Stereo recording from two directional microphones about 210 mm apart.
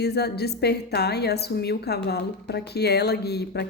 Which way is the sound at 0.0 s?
50° left (ahead or behind).